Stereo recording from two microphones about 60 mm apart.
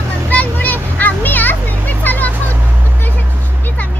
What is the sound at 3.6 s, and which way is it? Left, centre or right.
Music, left.